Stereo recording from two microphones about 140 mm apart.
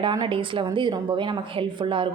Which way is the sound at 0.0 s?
35° right (ahead or behind).